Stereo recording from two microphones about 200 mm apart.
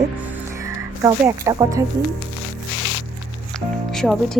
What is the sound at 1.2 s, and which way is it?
Speech, 15° right (ahead or behind).